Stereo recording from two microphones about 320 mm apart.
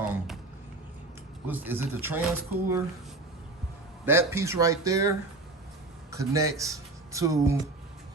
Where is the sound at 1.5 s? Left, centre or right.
Centre.